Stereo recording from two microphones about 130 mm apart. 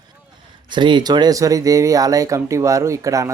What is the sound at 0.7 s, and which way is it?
A man's voice, 35° right (ahead or behind).